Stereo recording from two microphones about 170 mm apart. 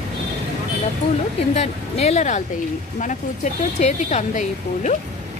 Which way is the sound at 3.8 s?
45° left (ahead or behind).